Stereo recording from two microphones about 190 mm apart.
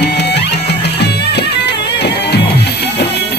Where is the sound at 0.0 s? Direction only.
60° left (ahead or behind).